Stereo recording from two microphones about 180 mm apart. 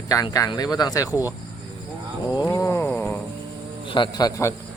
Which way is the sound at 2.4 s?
15° left (ahead or behind).